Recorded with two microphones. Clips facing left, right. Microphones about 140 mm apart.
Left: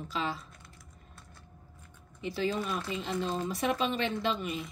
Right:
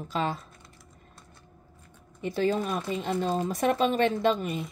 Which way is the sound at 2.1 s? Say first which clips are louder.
Right 5 dB; 50° right (ahead or behind).